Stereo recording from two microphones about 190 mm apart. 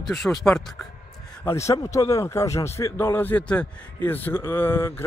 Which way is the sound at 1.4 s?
15° left (ahead or behind).